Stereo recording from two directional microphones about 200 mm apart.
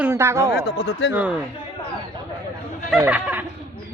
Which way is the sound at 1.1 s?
5° right (ahead or behind).